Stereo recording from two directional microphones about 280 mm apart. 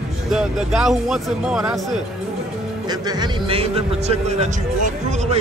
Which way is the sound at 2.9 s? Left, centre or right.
Centre.